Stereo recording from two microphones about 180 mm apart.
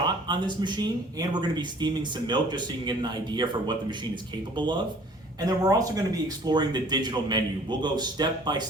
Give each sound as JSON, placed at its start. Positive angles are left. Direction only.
{"t": 0.0, "sound": "speech", "side_deg": -25}